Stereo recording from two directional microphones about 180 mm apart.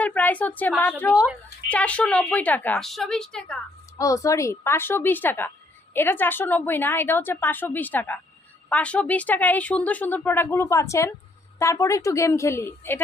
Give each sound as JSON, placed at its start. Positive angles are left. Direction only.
{"t": 0.0, "sound": "a sound", "side_deg": 10}
{"t": 0.8, "sound": "a woman's voice", "side_deg": 10}
{"t": 1.1, "sound": "speech", "side_deg": -5}
{"t": 1.6, "sound": "a woman's voice", "side_deg": 5}
{"t": 3.9, "sound": "a woman's voice", "side_deg": 20}